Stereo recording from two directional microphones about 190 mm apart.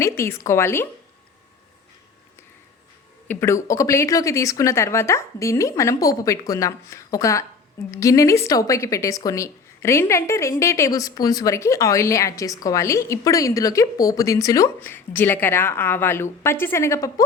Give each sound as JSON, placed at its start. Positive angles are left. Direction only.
{"t": 0.0, "sound": "a woman's voice", "side_deg": 15}
{"t": 3.2, "sound": "a woman's voice", "side_deg": 15}